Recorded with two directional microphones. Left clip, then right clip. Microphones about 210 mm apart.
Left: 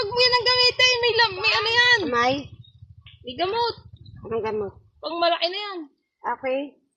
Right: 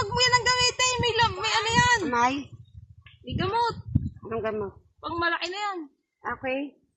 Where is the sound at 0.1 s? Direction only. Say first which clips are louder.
Left 3 dB; 20° right (ahead or behind).